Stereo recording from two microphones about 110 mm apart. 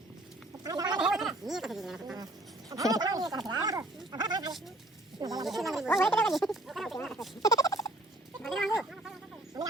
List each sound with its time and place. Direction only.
0.6 s speech: 35° right (ahead or behind)
0.9 s speech: 5° right (ahead or behind)
2.6 s speech: 30° right (ahead or behind)
5.5 s speech: centre (ahead or behind)
7.4 s gobble: 30° left (ahead or behind)
8.4 s a sound: 5° left (ahead or behind)
9.5 s a sound: 35° right (ahead or behind)